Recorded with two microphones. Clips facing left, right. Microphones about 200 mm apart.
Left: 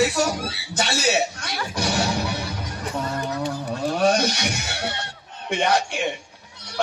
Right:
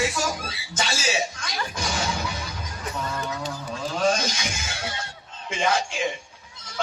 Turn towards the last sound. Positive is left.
turn(degrees=65)  # may be behind; listen again after turning